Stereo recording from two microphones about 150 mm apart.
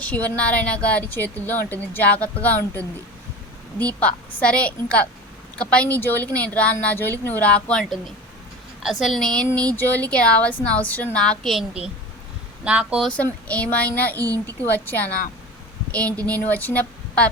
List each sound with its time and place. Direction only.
0.0 s a woman's voice: 10° left (ahead or behind)
3.8 s a woman's voice: 10° left (ahead or behind); by 13.1 s 5° right (ahead or behind)
13.1 s a woman's voice: 10° left (ahead or behind)
14.2 s a woman's voice: 20° right (ahead or behind)
14.7 s a woman's voice: 10° left (ahead or behind)